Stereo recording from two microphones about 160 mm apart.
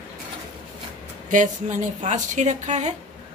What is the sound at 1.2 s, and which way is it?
A woman's voice, 50° right (ahead or behind).